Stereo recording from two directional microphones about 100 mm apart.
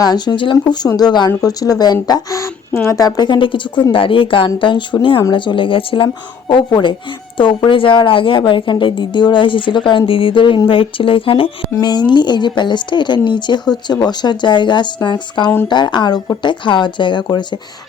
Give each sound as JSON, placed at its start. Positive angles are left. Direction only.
{"t": 0.0, "sound": "a woman's voice", "side_deg": 45}
{"t": 3.2, "sound": "a woman's voice", "side_deg": 55}
{"t": 6.5, "sound": "a woman's voice", "side_deg": 45}
{"t": 11.8, "sound": "a woman's voice", "side_deg": 45}